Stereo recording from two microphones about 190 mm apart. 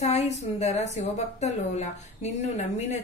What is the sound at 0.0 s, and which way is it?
A woman's voice, 35° left (ahead or behind).